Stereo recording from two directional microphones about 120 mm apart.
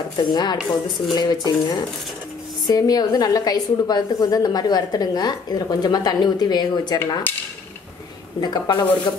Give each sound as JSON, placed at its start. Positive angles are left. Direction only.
{"t": 0.2, "sound": "a woman's voice", "side_deg": 35}
{"t": 8.4, "sound": "a woman's voice", "side_deg": 35}